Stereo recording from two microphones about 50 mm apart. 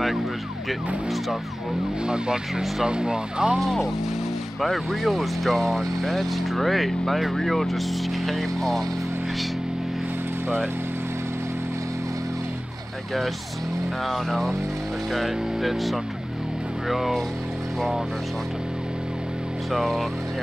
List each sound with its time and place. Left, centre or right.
2.0 s speech: centre
3.5 s speech: centre
14.0 s speech: centre
19.7 s speech: centre